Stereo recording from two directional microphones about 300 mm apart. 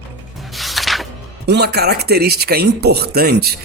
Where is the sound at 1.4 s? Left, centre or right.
Right.